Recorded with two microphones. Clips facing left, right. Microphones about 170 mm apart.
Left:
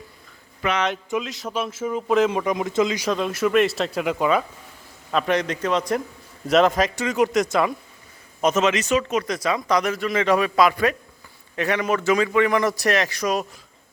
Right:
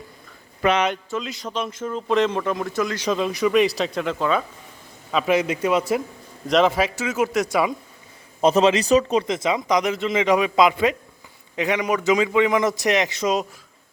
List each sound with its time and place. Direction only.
1.2 s speech: centre (ahead or behind); by 3.0 s 20° left (ahead or behind)
3.0 s speech: centre (ahead or behind)
5.1 s a man's voice: 5° right (ahead or behind)
8.4 s speech: 30° right (ahead or behind)